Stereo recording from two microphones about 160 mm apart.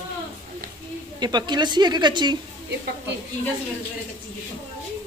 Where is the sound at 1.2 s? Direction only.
25° right (ahead or behind).